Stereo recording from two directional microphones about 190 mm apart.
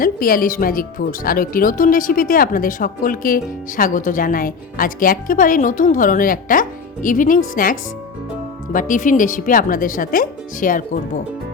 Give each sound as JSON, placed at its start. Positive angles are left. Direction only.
{"t": 0.0, "sound": "speech", "side_deg": 50}